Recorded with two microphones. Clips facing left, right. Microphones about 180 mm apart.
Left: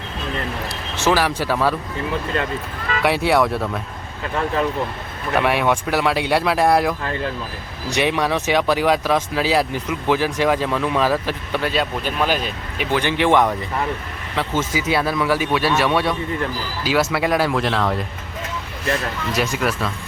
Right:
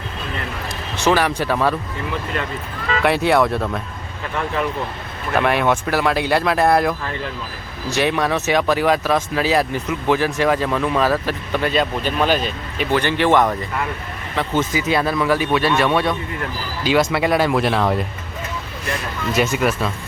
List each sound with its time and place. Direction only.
1.1 s speech: centre (ahead or behind)
3.0 s speech: 10° left (ahead or behind)
5.3 s speech: 5° left (ahead or behind)
14.7 s speech: 10° left (ahead or behind)
17.5 s speech: 10° right (ahead or behind)
19.4 s speech: centre (ahead or behind)